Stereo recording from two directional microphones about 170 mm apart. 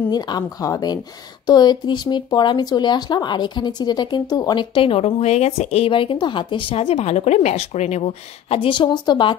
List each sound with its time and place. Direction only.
0.1 s speech: 25° left (ahead or behind)